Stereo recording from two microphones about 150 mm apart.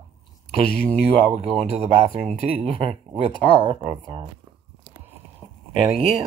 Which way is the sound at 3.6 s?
35° right (ahead or behind).